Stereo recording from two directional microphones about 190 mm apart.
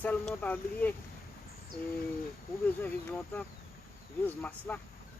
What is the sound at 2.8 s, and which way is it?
Speech, 5° left (ahead or behind).